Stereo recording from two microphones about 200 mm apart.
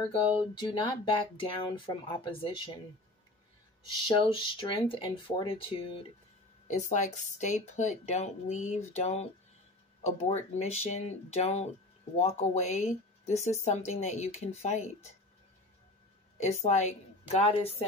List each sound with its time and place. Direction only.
0.6 s speech: 25° left (ahead or behind)
4.1 s speech: 25° left (ahead or behind)
6.7 s speech: 35° left (ahead or behind)
16.6 s speech: 35° left (ahead or behind)